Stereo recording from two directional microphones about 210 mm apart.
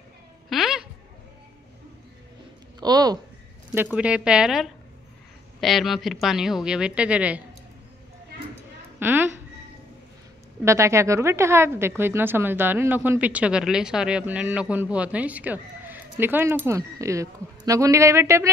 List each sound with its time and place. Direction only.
0.5 s a sound: centre (ahead or behind)
2.8 s speech: 20° right (ahead or behind)
3.7 s a woman's voice: 5° right (ahead or behind)
9.0 s speech: 10° right (ahead or behind)
10.6 s speech: 15° right (ahead or behind)